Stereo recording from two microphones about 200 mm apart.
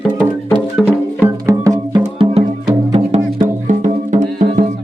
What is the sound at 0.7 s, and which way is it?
Music, 10° right (ahead or behind).